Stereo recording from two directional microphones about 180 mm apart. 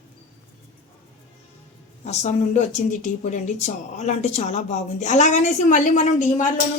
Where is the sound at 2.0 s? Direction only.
40° left (ahead or behind).